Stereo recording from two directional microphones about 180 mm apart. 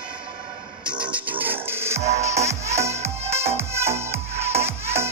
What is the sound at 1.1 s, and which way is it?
Music, 10° right (ahead or behind).